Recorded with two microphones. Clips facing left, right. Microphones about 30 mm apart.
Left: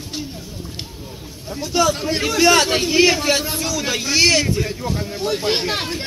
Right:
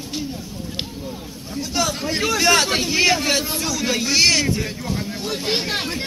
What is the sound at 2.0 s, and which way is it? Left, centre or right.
Speech, centre.